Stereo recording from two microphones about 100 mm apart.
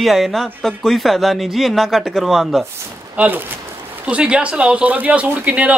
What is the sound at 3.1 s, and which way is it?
Speech, 20° right (ahead or behind).